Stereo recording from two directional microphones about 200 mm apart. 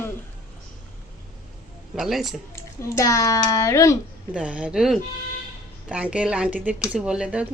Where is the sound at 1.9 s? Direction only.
Centre (ahead or behind).